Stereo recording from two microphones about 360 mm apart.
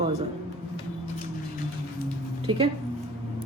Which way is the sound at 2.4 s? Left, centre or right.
Centre.